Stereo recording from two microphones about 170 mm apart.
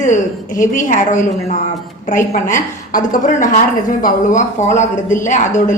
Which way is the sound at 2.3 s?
50° left (ahead or behind).